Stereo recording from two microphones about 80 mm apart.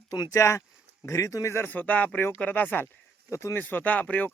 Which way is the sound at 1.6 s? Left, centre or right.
Left.